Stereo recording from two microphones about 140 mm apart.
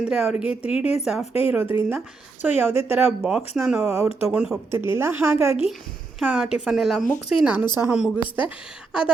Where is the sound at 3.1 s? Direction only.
5° right (ahead or behind).